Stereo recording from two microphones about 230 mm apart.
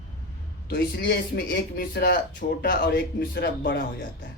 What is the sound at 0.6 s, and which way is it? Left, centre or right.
A man's voice, left.